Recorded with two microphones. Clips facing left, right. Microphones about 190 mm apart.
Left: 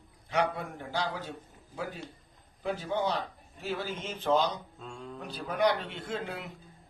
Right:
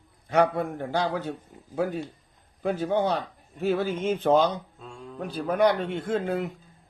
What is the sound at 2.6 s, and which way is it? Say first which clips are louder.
Speech: right 6 dB; 50° right (ahead or behind).